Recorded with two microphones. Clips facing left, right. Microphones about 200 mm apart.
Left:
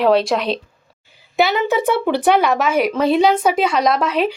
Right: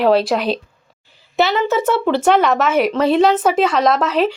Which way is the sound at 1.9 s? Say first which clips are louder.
Right 1 dB; centre (ahead or behind).